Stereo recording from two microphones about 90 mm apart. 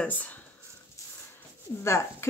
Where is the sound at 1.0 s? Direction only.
35° left (ahead or behind).